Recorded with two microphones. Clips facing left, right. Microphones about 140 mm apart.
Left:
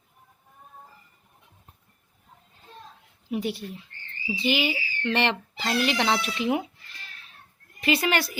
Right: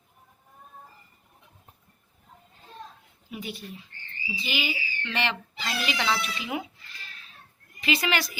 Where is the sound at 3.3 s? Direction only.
65° left (ahead or behind).